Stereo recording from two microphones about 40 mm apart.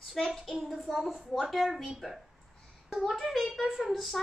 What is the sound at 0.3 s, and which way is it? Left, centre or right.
A woman's voice, centre.